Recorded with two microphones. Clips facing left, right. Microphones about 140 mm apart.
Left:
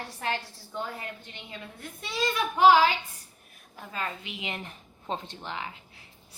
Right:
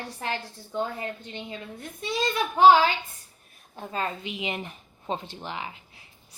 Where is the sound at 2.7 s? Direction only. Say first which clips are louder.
Right 2 dB; 25° right (ahead or behind).